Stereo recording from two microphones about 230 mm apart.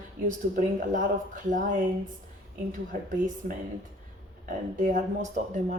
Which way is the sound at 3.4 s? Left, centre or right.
Right.